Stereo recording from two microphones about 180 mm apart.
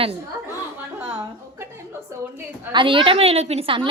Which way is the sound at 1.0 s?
15° right (ahead or behind).